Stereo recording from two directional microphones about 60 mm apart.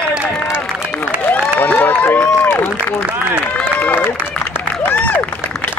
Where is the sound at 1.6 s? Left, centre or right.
Left.